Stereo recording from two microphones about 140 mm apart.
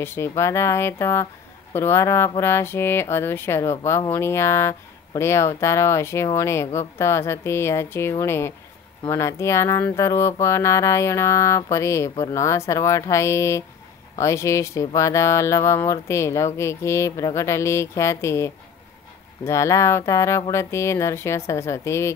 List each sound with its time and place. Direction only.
0.0 s speech: 15° left (ahead or behind)